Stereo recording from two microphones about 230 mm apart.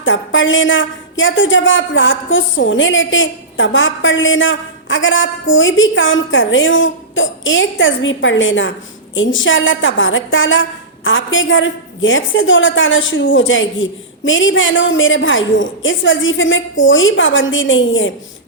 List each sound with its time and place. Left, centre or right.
0.0 s a woman's voice: left